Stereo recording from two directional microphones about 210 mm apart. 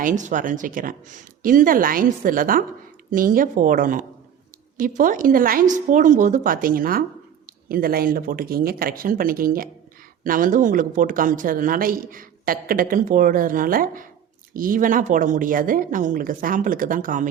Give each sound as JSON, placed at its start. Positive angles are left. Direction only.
{"t": 0.0, "sound": "a woman's voice", "side_deg": -35}